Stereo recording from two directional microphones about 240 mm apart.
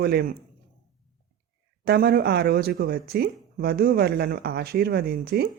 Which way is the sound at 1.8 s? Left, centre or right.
Right.